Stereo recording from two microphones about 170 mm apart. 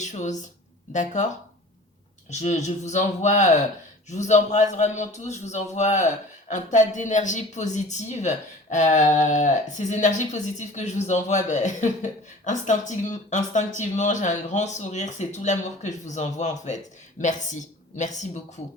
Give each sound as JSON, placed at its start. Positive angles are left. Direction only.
{"t": 0.0, "sound": "speech", "side_deg": 45}
{"t": 2.3, "sound": "speech", "side_deg": 40}